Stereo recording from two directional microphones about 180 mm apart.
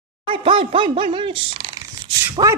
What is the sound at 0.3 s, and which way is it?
Speech, 30° right (ahead or behind).